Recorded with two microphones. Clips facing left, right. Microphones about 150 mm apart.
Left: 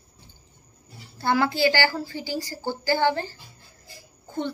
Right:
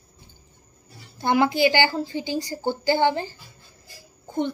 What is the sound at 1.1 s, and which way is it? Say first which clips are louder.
A woman's voice: right 3 dB; 20° right (ahead or behind).